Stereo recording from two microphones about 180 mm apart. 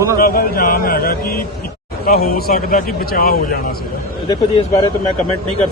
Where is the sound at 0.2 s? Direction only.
55° left (ahead or behind).